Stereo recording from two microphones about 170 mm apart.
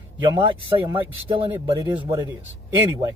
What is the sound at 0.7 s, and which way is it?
Speech, 30° right (ahead or behind).